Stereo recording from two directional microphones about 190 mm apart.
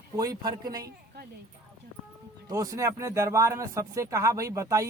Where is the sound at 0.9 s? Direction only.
55° right (ahead or behind).